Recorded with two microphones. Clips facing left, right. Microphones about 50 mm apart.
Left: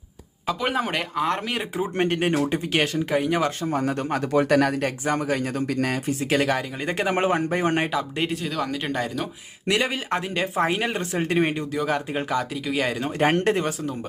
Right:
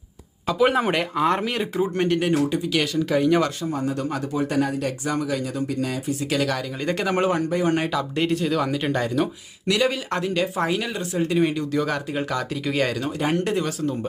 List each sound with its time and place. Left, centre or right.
0.4 s speech: centre
1.5 s speech: centre
2.0 s speech: left
3.1 s speech: centre
3.6 s speech: left
3.8 s speech: left
4.4 s speech: left
4.8 s speech: left
6.5 s speech: left
7.9 s speech: centre
9.6 s speech: left
10.8 s speech: left
11.7 s speech: centre
13.1 s speech: left